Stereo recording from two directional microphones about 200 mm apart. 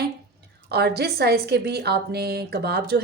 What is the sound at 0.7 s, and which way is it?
A woman's voice, 55° right (ahead or behind).